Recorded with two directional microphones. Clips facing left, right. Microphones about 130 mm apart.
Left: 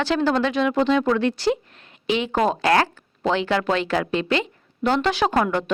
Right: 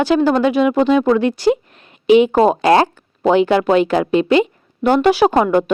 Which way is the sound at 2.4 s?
25° right (ahead or behind).